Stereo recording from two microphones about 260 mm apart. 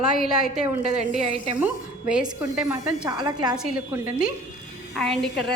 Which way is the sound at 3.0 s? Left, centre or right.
Centre.